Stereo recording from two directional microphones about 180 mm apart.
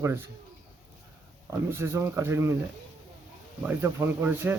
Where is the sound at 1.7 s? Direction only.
15° right (ahead or behind).